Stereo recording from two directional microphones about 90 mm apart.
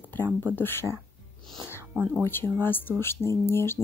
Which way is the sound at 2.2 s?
25° left (ahead or behind).